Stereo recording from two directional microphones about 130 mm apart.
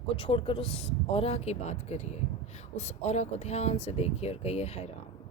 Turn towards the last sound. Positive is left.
turn(degrees=55)  # may be behind; listen again after turning